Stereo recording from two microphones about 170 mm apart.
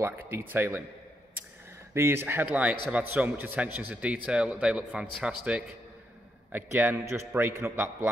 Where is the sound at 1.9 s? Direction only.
15° right (ahead or behind).